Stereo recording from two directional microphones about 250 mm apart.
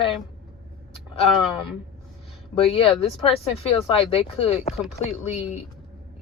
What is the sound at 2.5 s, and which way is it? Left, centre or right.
Speech, left.